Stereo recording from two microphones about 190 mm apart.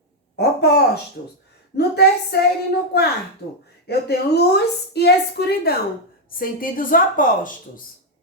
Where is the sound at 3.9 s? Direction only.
55° left (ahead or behind).